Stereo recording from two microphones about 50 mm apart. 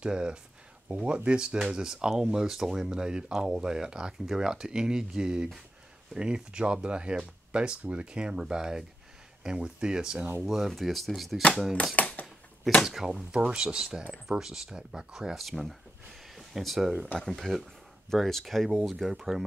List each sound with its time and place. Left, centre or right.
0.0 s speech: centre
10.4 s speech: centre
11.7 s a sound: left
12.8 s speech: centre
15.3 s a sound: centre
16.5 s speech: centre
16.9 s speech: right
17.3 s speech: centre